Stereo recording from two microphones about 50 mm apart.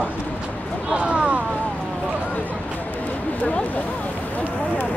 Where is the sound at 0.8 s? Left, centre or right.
Right.